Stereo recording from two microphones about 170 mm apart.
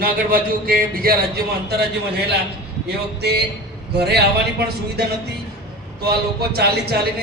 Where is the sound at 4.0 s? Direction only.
70° right (ahead or behind).